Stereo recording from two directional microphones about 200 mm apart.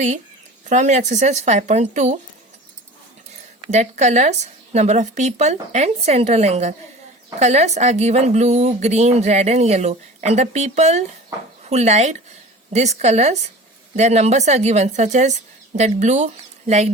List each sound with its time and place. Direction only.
0.7 s a woman's voice: 35° right (ahead or behind)
3.7 s a woman's voice: 35° right (ahead or behind)